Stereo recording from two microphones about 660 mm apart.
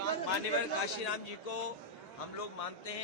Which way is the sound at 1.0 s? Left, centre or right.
Left.